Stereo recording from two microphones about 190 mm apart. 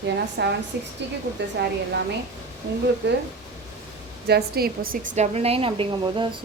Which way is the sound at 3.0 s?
65° right (ahead or behind).